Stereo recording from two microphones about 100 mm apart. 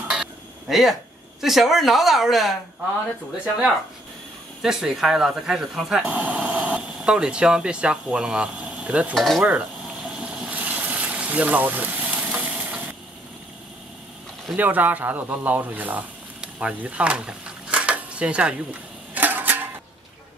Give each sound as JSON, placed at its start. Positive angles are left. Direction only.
{"t": 0.1, "sound": "dishes", "side_deg": -5}
{"t": 1.4, "sound": "speech", "side_deg": -5}
{"t": 4.6, "sound": "speech", "side_deg": -5}
{"t": 9.1, "sound": "speech", "side_deg": 0}
{"t": 10.0, "sound": "a sound", "side_deg": -10}
{"t": 14.6, "sound": "speech", "side_deg": -15}